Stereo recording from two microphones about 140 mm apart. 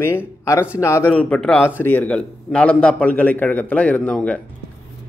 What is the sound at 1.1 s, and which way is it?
A man's voice, 10° left (ahead or behind).